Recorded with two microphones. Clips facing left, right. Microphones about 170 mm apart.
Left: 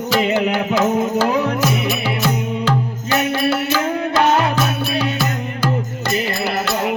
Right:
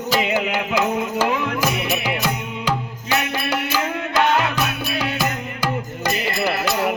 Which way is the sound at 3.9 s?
40° left (ahead or behind).